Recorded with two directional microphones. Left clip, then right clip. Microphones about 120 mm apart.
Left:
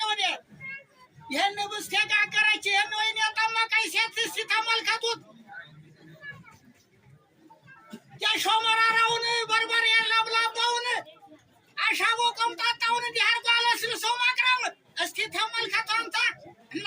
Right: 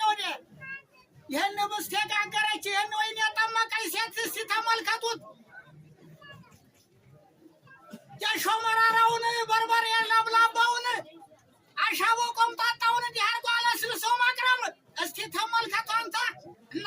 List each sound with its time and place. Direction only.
0.0 s a sound: 50° right (ahead or behind)
1.3 s speech: 50° right (ahead or behind)
8.2 s a woman's voice: 50° right (ahead or behind)